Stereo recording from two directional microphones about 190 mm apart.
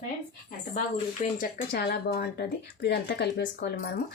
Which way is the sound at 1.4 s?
55° left (ahead or behind).